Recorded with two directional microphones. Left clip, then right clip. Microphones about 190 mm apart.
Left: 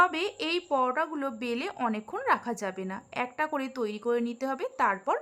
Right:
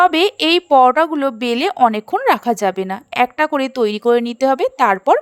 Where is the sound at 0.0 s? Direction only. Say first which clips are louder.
Right 13 dB; 45° right (ahead or behind).